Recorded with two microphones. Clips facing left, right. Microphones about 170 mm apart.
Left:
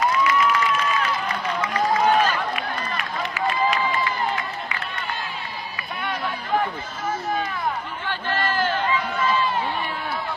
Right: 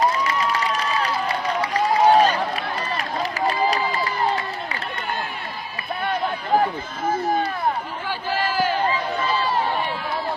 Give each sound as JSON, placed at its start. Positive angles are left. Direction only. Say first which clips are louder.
{"t": 0.0, "sound": "crowd", "louder": "left 1 dB", "side_deg": -35}
{"t": 1.6, "sound": "run", "louder": "right 3 dB", "side_deg": -35}
{"t": 8.4, "sound": "crowd", "louder": "right 2 dB", "side_deg": -10}
{"t": 8.9, "sound": "run", "louder": "even", "side_deg": -35}